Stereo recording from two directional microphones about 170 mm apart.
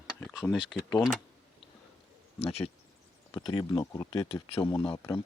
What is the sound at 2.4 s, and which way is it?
Speech, 40° left (ahead or behind).